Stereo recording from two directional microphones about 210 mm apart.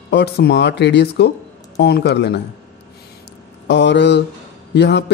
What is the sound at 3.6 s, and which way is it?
Speech, 55° left (ahead or behind).